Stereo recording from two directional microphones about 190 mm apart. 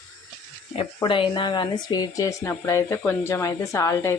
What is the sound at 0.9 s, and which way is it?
Speech, 25° left (ahead or behind).